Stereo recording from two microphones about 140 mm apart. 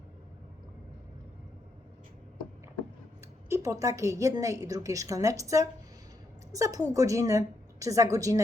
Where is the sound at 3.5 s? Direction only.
20° right (ahead or behind).